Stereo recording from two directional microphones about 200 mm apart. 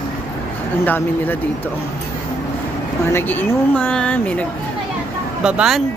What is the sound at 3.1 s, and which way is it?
Speech, 10° left (ahead or behind).